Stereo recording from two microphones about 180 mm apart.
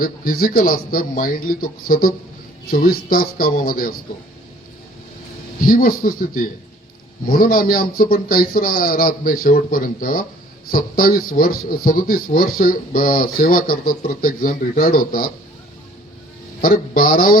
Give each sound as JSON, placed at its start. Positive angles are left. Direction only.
{"t": 0.0, "sound": "a man's voice", "side_deg": 55}
{"t": 5.5, "sound": "a man's voice", "side_deg": 50}
{"t": 16.6, "sound": "a man's voice", "side_deg": 50}